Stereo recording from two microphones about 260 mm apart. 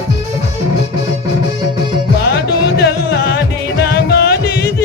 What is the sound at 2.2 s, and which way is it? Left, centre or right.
Music, left.